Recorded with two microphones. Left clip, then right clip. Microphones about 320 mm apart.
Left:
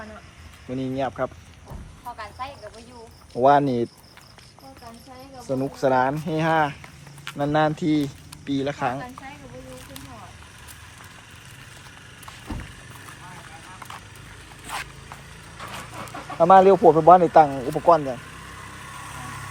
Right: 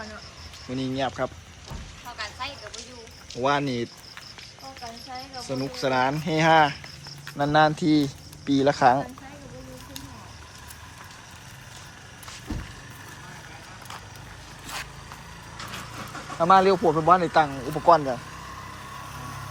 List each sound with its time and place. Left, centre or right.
0.7 s speech: centre
2.1 s a sound: left
3.3 s speech: centre
5.6 s speech: centre
16.4 s speech: centre
17.8 s speech: centre